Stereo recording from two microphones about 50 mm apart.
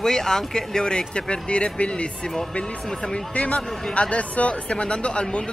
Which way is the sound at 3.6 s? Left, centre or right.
Centre.